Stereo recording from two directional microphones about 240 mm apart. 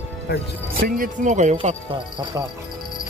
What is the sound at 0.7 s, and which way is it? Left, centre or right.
Speech, right.